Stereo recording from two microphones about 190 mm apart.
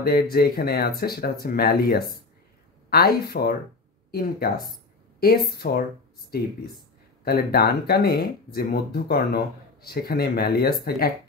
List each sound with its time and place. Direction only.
0.0 s speech: 55° left (ahead or behind)